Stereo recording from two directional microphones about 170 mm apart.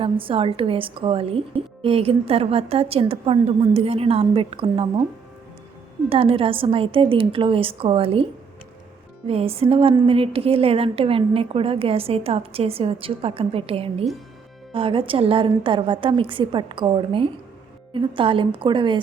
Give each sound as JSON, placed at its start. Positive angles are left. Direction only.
{"t": 0.0, "sound": "a woman's voice", "side_deg": -30}
{"t": 6.1, "sound": "a woman's voice", "side_deg": -35}